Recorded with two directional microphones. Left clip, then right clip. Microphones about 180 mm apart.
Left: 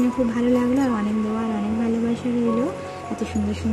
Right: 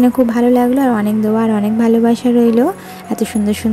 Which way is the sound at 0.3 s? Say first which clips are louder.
Right 9 dB; 25° right (ahead or behind).